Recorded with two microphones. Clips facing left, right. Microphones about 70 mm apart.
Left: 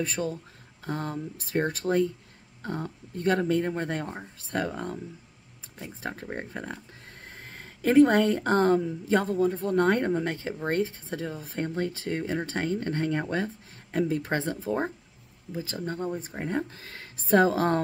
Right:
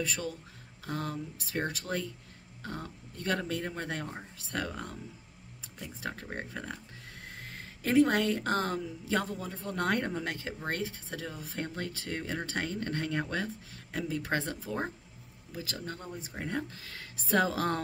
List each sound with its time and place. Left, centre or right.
0.0 s speech: left